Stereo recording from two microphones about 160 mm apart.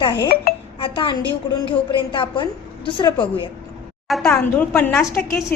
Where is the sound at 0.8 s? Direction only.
35° left (ahead or behind).